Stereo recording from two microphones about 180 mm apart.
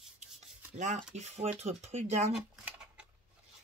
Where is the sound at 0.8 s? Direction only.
45° right (ahead or behind).